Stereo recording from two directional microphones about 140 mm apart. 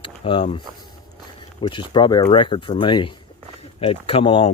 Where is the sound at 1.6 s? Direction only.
35° left (ahead or behind).